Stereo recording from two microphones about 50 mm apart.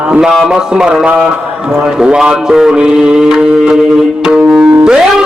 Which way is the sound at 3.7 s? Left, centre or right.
Centre.